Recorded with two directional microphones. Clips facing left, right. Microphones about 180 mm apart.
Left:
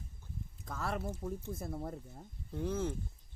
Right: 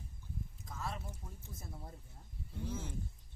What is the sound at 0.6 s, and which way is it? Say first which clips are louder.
Speech: left 7 dB; 65° left (ahead or behind).